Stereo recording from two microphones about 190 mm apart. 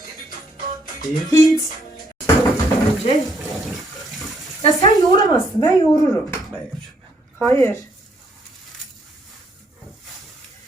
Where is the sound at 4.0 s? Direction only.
Centre (ahead or behind).